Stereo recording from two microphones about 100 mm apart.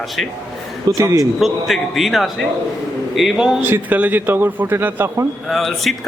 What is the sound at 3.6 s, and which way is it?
A man's voice, 20° right (ahead or behind).